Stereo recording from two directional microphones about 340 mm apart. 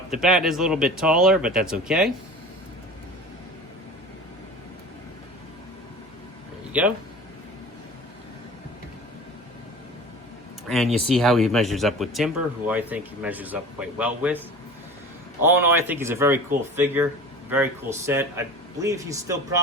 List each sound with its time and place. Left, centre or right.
0.1 s speech: centre
10.7 s speech: centre